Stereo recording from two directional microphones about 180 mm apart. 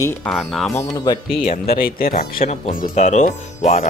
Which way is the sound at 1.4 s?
50° left (ahead or behind).